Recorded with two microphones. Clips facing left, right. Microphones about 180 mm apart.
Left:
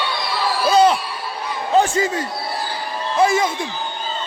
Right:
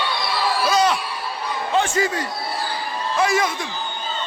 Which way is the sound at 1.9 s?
25° left (ahead or behind).